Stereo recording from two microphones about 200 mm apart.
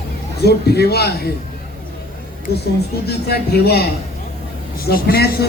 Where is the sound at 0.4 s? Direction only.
55° left (ahead or behind).